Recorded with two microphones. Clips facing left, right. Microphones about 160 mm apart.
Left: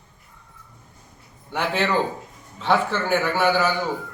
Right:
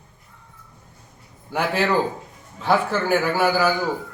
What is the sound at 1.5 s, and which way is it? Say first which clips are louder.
A man's voice: right 2 dB; 10° right (ahead or behind).